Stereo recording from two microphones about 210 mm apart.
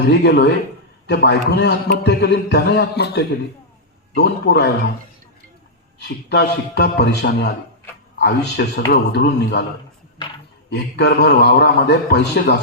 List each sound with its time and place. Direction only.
0.1 s a man's voice: 55° left (ahead or behind)
6.0 s a man's voice: 50° left (ahead or behind)
10.7 s a man's voice: 55° left (ahead or behind)